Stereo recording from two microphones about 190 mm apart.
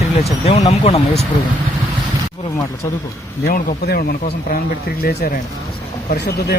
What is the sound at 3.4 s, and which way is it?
Speech, 50° left (ahead or behind).